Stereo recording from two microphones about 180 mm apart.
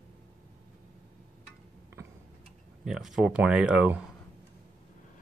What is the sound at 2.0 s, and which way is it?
Tick-tock, 15° right (ahead or behind).